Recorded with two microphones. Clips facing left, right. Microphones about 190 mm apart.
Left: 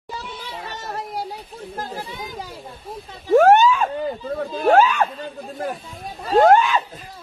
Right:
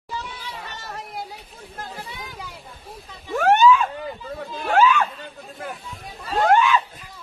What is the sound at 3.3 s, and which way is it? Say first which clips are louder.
Police car: left 3 dB; 45° left (ahead or behind).